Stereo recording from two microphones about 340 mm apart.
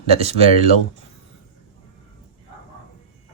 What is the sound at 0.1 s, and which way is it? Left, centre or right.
Speech, centre.